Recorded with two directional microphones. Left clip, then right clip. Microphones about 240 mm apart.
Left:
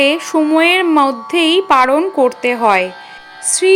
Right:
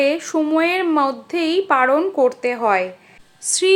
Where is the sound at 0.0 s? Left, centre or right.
Left.